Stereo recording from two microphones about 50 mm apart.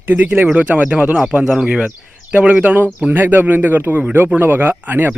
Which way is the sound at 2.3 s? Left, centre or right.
Right.